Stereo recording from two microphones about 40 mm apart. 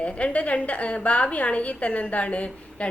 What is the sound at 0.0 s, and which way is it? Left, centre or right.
A woman's voice, left.